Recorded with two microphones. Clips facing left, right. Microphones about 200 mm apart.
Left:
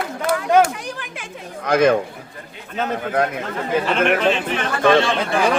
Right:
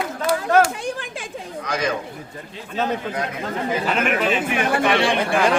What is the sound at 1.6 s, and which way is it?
Speech, 55° left (ahead or behind).